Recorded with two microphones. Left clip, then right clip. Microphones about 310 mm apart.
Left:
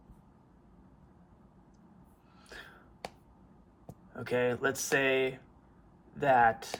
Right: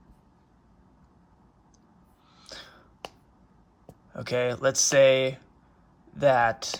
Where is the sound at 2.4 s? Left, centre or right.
Centre.